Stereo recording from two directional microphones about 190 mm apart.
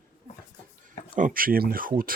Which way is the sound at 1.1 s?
45° right (ahead or behind).